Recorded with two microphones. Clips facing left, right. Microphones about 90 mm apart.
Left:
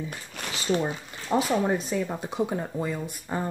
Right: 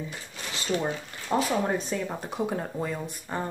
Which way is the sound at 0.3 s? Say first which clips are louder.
Left 4 dB; 60° left (ahead or behind).